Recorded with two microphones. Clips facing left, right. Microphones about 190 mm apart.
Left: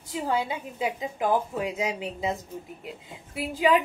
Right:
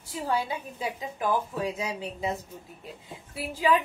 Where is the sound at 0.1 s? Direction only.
20° left (ahead or behind).